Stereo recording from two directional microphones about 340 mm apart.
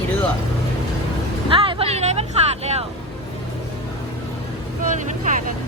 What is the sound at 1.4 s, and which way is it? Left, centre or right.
Vehicle, centre.